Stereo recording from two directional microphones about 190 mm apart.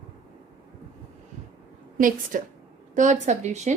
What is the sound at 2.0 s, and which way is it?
A woman's voice, 45° right (ahead or behind).